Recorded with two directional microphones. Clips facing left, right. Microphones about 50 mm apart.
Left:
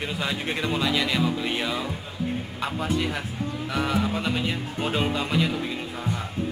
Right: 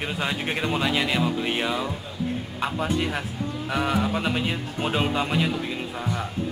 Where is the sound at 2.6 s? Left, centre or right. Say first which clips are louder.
Right 2 dB; centre.